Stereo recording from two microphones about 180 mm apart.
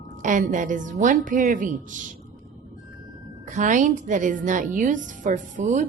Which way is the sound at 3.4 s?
45° right (ahead or behind).